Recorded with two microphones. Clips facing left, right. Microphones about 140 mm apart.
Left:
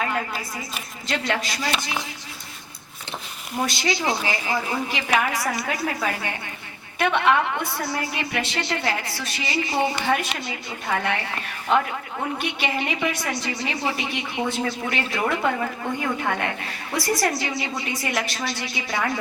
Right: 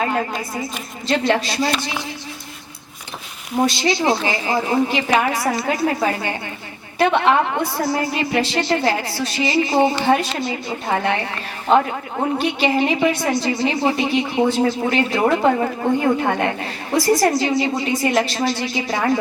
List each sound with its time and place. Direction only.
0.0 s a woman's voice: 35° right (ahead or behind)
3.6 s a woman's voice: 30° right (ahead or behind)
17.5 s speech: 45° right (ahead or behind)
17.8 s a woman's voice: 25° right (ahead or behind)